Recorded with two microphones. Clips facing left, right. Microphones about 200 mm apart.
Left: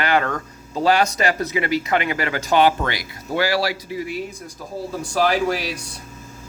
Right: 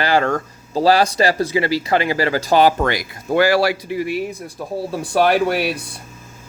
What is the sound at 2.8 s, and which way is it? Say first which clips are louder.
Speech: right 6 dB; 50° right (ahead or behind).